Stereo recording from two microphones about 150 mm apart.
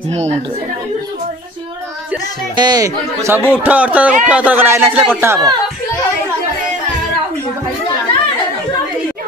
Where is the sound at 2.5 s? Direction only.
25° right (ahead or behind).